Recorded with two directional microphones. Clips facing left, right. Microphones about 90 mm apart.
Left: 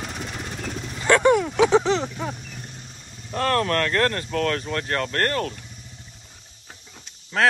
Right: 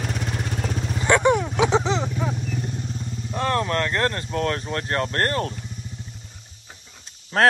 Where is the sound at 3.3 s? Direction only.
15° right (ahead or behind).